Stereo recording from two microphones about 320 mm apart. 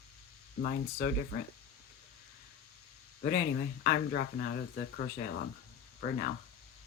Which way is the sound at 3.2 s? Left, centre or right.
Left.